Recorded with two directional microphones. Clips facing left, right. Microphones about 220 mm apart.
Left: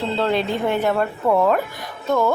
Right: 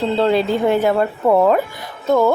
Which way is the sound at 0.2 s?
35° right (ahead or behind).